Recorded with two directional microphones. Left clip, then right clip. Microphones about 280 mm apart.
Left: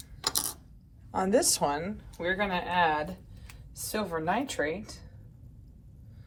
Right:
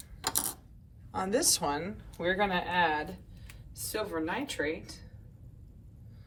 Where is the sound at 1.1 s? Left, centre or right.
Centre.